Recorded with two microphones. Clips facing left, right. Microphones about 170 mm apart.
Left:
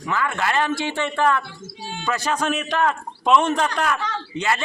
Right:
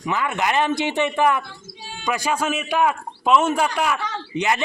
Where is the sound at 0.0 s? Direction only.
20° right (ahead or behind).